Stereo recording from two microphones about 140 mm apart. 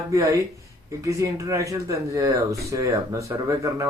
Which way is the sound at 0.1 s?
20° right (ahead or behind).